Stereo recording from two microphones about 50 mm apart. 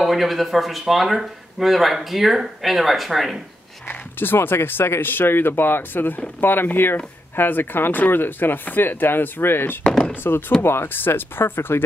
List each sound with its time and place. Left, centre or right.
0.0 s speech: centre
3.9 s speech: left